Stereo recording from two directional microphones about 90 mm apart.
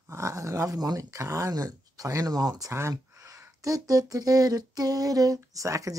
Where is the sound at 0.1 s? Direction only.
35° right (ahead or behind).